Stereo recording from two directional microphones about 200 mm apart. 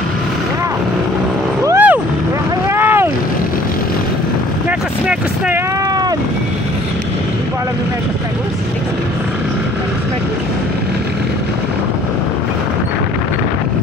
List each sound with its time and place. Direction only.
1.7 s vehicle: 10° right (ahead or behind)
4.6 s vehicle: 5° right (ahead or behind)